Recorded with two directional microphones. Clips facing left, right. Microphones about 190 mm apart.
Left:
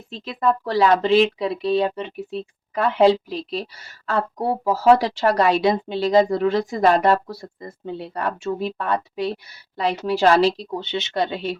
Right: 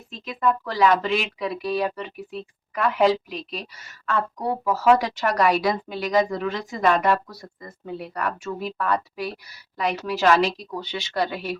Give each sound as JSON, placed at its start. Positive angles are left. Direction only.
{"t": 0.1, "sound": "speech", "side_deg": 30}